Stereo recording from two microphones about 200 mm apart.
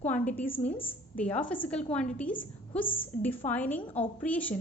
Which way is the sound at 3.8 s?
25° left (ahead or behind).